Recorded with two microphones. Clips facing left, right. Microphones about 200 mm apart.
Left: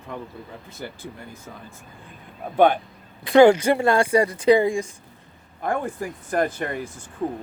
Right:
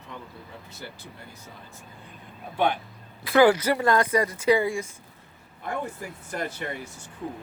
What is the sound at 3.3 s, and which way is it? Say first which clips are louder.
Speech: left 5 dB; 25° left (ahead or behind).